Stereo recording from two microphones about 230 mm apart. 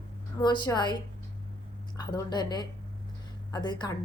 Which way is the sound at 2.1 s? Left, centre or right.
Centre.